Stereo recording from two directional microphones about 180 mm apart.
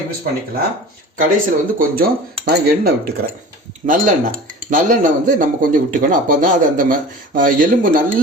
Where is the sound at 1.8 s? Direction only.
55° right (ahead or behind).